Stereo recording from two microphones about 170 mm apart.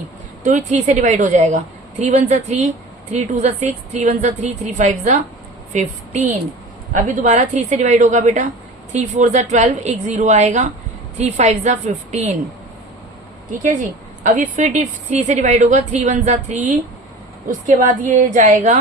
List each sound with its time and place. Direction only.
0.4 s a woman's voice: 45° right (ahead or behind)
14.3 s a woman's voice: 50° right (ahead or behind)